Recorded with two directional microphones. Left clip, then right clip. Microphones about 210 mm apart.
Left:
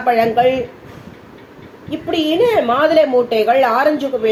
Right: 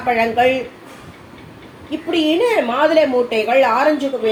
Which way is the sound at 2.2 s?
30° left (ahead or behind).